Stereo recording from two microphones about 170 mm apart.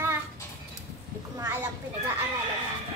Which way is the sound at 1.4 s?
15° right (ahead or behind).